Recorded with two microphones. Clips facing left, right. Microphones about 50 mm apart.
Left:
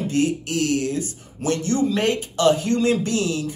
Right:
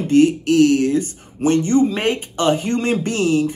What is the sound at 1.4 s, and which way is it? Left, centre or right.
Speech, right.